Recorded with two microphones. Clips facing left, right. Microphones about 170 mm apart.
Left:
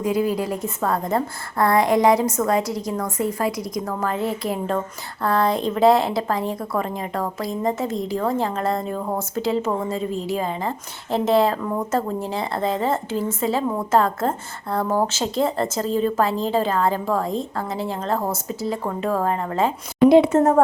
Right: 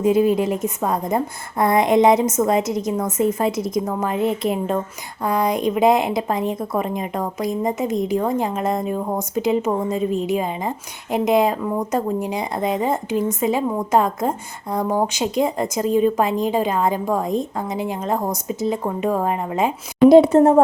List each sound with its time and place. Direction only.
0.0 s a woman's voice: 25° right (ahead or behind)
20.1 s a woman's voice: 40° right (ahead or behind)